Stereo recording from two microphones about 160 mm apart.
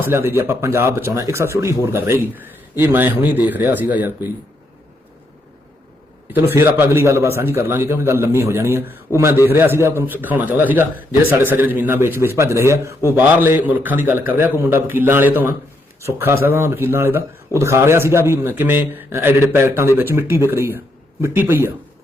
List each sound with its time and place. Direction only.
0.0 s speech: 15° right (ahead or behind)
6.5 s speech: 15° right (ahead or behind)